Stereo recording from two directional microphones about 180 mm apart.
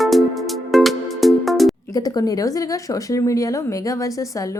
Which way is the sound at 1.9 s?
20° left (ahead or behind).